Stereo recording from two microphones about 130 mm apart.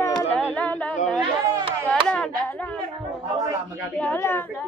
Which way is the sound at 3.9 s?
15° left (ahead or behind).